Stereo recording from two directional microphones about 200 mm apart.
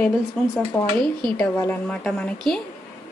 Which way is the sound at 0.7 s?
15° left (ahead or behind).